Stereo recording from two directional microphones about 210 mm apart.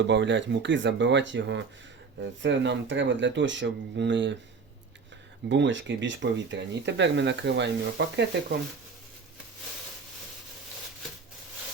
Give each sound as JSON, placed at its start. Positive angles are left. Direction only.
{"t": 0.1, "sound": "speech", "side_deg": -60}
{"t": 5.5, "sound": "speech", "side_deg": -60}